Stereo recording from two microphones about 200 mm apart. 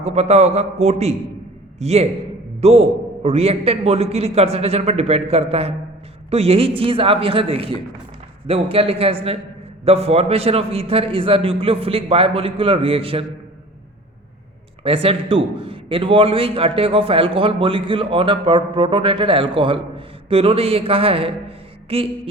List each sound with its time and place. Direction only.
0.0 s a man's voice: 30° right (ahead or behind)
14.8 s a man's voice: 30° right (ahead or behind)